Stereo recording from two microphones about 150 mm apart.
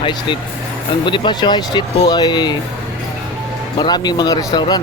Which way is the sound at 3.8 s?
30° left (ahead or behind).